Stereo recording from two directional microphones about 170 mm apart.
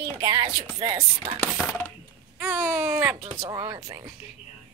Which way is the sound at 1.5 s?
5° left (ahead or behind).